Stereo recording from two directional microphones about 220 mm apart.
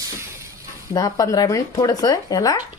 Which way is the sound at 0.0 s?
15° right (ahead or behind).